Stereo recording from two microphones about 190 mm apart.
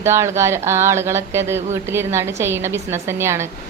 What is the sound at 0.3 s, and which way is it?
Speech, 15° right (ahead or behind).